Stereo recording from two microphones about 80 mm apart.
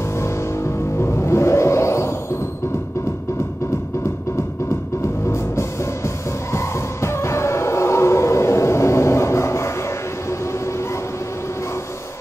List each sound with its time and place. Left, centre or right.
0.2 s music: left
5.0 s music: left